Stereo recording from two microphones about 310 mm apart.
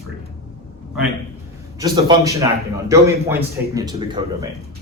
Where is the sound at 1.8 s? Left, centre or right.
Centre.